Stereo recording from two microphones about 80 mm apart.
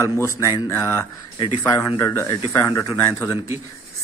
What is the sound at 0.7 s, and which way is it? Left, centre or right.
A man's voice, left.